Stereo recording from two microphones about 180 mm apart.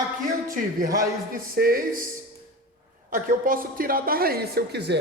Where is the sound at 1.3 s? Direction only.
55° right (ahead or behind).